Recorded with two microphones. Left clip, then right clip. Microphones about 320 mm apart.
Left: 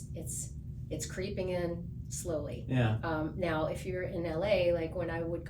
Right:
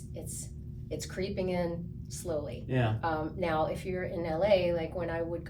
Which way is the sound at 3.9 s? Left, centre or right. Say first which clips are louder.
Right 2 dB; centre.